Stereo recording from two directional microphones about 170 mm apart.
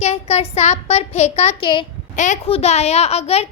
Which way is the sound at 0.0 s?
40° left (ahead or behind).